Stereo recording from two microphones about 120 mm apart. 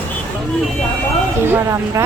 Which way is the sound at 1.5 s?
20° right (ahead or behind).